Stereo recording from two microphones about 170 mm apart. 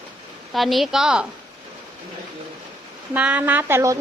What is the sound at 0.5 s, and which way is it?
Speech, centre (ahead or behind).